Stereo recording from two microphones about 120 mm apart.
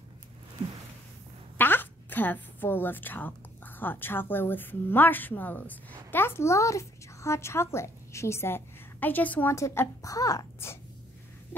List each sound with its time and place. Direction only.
1.6 s a woman's voice: 15° left (ahead or behind)